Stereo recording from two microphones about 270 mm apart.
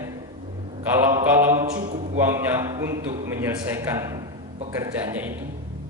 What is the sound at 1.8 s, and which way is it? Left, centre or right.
Speech, right.